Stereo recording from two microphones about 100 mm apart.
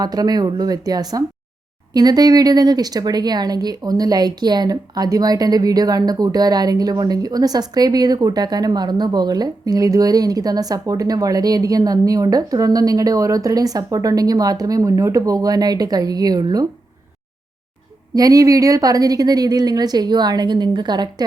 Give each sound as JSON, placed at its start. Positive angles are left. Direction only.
{"t": 0.0, "sound": "speech", "side_deg": -40}
{"t": 18.1, "sound": "speech", "side_deg": -40}